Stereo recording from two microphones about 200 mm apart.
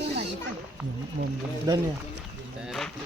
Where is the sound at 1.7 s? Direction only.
15° right (ahead or behind).